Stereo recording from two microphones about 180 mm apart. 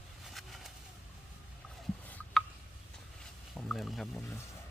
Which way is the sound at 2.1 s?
10° left (ahead or behind).